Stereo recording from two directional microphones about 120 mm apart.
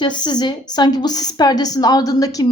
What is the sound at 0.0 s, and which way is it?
A woman's voice, 40° left (ahead or behind).